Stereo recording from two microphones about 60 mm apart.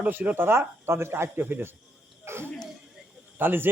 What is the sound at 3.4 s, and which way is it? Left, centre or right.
Speech, right.